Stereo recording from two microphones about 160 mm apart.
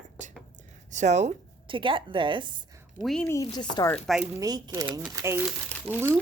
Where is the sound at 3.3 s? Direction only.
25° left (ahead or behind).